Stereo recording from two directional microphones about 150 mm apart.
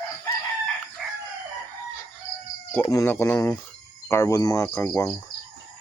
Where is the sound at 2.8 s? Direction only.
20° left (ahead or behind).